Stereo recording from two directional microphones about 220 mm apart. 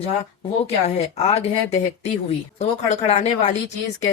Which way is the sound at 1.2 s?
30° left (ahead or behind).